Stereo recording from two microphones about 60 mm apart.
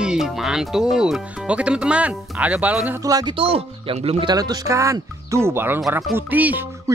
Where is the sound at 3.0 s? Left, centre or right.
Right.